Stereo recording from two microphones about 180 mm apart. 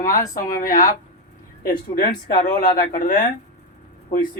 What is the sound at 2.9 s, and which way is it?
Speech, 45° left (ahead or behind).